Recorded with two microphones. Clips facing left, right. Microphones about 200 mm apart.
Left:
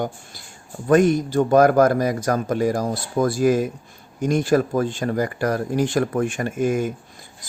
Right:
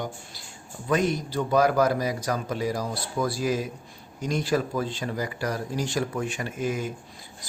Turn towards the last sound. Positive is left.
turn(degrees=50)  # may be behind; listen again after turning